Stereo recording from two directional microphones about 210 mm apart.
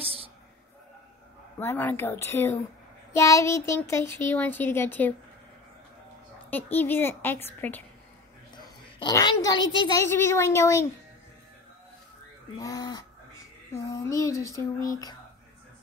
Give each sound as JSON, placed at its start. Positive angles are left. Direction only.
{"t": 1.6, "sound": "a child's voice", "side_deg": 10}
{"t": 6.5, "sound": "a child's voice", "side_deg": 10}
{"t": 8.5, "sound": "a sound", "side_deg": 20}
{"t": 9.8, "sound": "a child's voice", "side_deg": 10}
{"t": 12.5, "sound": "a child's voice", "side_deg": 15}